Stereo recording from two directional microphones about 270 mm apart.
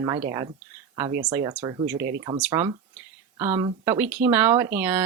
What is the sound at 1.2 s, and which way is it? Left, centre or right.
Speech, centre.